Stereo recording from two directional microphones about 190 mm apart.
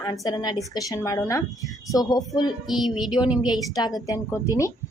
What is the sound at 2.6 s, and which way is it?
Speech, centre (ahead or behind).